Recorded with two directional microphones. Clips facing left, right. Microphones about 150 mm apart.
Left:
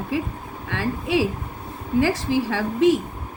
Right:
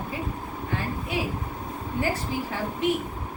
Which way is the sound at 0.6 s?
80° left.